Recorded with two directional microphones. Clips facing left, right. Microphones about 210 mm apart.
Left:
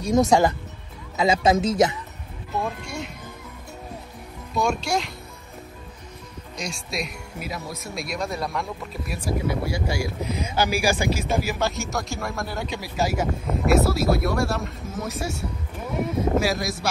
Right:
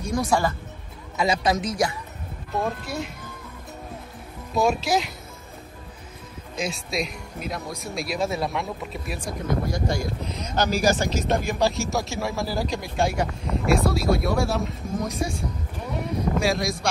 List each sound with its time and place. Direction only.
1.1 s speech: 25° left (ahead or behind)
2.6 s speech: centre (ahead or behind)
4.6 s speech: centre (ahead or behind)
6.6 s speech: centre (ahead or behind)